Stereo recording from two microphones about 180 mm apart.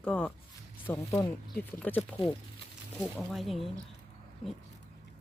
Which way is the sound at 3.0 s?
5° left (ahead or behind).